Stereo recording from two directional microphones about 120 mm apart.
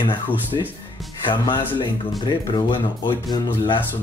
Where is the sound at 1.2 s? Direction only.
40° left (ahead or behind).